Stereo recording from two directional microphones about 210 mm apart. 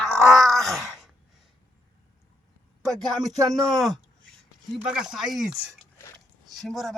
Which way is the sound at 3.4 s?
15° right (ahead or behind).